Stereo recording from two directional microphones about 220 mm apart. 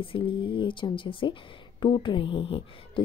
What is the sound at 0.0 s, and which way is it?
Speech, 25° left (ahead or behind).